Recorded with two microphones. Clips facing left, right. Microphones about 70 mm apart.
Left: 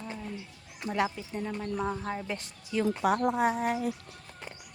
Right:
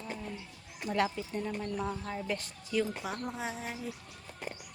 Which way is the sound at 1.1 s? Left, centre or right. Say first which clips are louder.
Even; centre.